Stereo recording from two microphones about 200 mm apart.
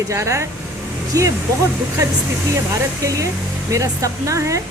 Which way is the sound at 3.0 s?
15° right (ahead or behind).